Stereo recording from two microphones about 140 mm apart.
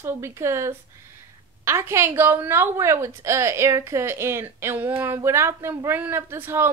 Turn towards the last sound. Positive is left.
turn(degrees=-15)  # may be behind; listen again after turning